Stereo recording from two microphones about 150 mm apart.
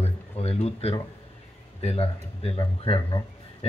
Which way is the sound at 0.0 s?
45° left (ahead or behind).